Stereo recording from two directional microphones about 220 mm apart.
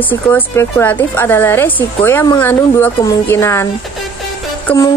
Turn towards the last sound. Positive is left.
turn(degrees=15)  # may be behind; listen again after turning